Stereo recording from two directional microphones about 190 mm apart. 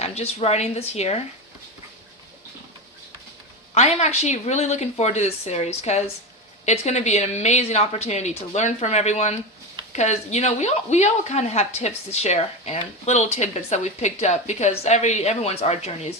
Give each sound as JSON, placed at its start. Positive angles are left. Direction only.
{"t": 0.0, "sound": "speech", "side_deg": 35}
{"t": 3.8, "sound": "speech", "side_deg": 35}